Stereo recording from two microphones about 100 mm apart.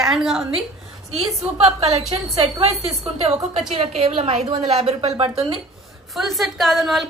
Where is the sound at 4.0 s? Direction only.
90° right; by 5.5 s 70° right (ahead or behind).